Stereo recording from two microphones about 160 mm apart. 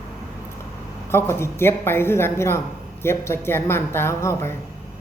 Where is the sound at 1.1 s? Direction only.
15° left (ahead or behind).